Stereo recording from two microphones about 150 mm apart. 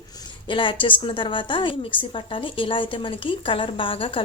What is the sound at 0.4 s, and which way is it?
A woman's voice, 35° left (ahead or behind).